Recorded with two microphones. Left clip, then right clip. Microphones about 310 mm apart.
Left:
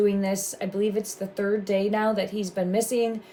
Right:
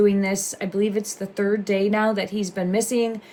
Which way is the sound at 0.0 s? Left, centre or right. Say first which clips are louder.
Right 4 dB; right.